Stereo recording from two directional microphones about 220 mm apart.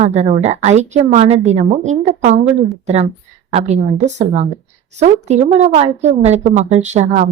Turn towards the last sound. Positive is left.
turn(degrees=-30)  # may be behind; listen again after turning